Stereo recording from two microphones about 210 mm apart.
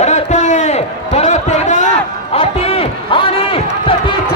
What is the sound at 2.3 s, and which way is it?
Run, 30° left (ahead or behind).